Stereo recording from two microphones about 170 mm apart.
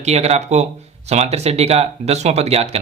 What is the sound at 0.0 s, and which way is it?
Speech, 40° right (ahead or behind).